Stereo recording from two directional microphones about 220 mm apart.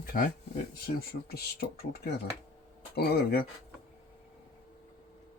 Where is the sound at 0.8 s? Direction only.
45° left (ahead or behind).